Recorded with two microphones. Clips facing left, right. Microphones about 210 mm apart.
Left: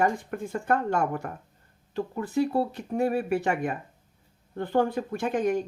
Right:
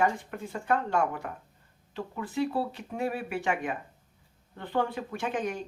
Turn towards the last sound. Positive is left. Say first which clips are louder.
# left 6 dB
turn(degrees=45)  # may be behind; listen again after turning